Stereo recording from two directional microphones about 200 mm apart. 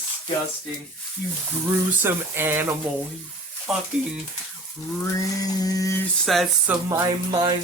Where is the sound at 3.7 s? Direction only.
Centre (ahead or behind).